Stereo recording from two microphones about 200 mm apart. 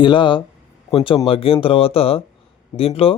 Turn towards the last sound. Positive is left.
turn(degrees=30)  # may be behind; listen again after turning